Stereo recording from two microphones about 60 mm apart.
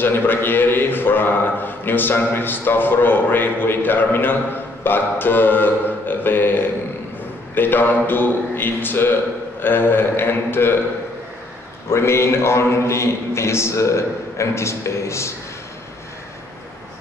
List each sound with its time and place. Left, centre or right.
0.0 s a man's voice: left
11.9 s a man's voice: left